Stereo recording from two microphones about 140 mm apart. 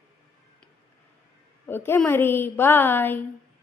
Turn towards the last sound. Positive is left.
turn(degrees=15)  # may be behind; listen again after turning